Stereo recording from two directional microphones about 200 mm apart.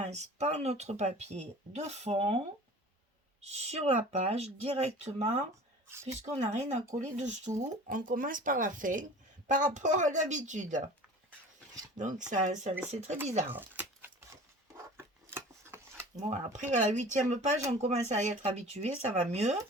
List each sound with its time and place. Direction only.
0.0 s speech: 35° right (ahead or behind)
3.4 s speech: 30° right (ahead or behind)
5.9 s speech: 15° right (ahead or behind)
6.2 s speech: 35° right (ahead or behind)
11.9 s speech: 40° right (ahead or behind)
13.5 s a sound: 10° right (ahead or behind)
14.9 s scissors: 10° right (ahead or behind)
16.3 s speech: 35° right (ahead or behind)